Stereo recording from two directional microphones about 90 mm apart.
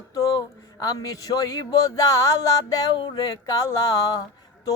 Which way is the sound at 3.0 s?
65° left (ahead or behind).